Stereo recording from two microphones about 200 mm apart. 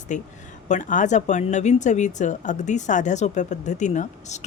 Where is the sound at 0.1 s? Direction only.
40° left (ahead or behind).